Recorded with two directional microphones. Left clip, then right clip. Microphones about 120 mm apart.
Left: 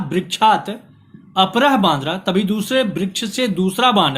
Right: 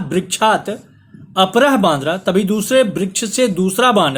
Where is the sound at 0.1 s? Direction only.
45° right (ahead or behind).